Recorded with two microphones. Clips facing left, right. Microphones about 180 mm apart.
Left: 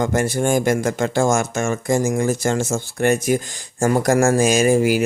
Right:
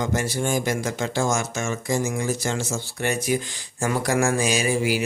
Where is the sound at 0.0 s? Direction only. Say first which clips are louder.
Left 6 dB; 50° left (ahead or behind).